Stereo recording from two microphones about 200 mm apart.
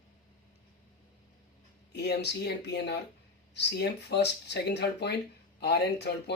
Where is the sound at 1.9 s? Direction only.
55° left (ahead or behind).